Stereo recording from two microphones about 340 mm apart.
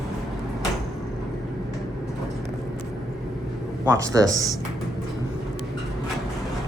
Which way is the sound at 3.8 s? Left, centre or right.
Centre.